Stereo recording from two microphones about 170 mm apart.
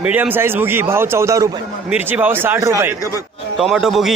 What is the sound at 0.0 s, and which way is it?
A man's voice, 10° right (ahead or behind).